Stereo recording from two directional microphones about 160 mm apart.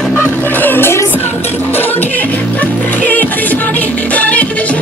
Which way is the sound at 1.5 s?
10° left (ahead or behind).